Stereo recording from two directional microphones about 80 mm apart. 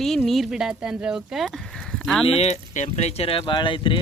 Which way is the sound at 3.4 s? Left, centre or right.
Left.